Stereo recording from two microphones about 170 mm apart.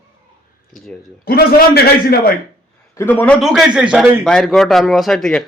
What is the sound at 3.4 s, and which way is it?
A man's voice, centre (ahead or behind).